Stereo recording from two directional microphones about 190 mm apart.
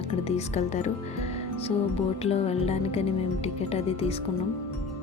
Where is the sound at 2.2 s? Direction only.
35° left (ahead or behind).